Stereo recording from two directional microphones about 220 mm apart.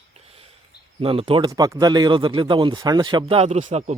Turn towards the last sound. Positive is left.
turn(degrees=-30)  # may be behind; listen again after turning